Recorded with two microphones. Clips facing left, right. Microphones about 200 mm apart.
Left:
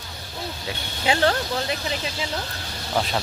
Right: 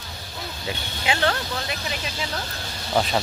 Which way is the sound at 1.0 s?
30° left (ahead or behind).